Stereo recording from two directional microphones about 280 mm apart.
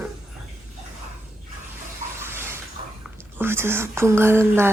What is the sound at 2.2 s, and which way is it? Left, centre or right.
Bathtub, centre.